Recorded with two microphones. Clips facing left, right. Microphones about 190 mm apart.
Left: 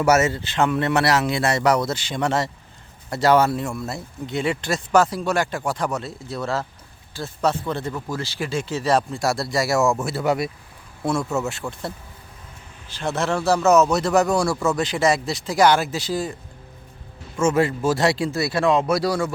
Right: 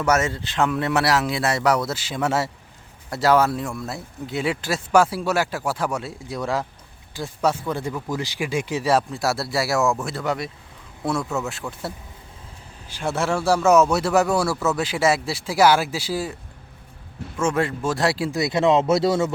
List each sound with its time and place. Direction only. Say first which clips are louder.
0.0 s speech: left 3 dB; 5° left (ahead or behind)
11.0 s speech: left 2 dB; centre (ahead or behind)
12.9 s speech: even; 10° right (ahead or behind)
17.3 s speech: left 3 dB; centre (ahead or behind)
18.3 s speech: right 1 dB; 20° right (ahead or behind)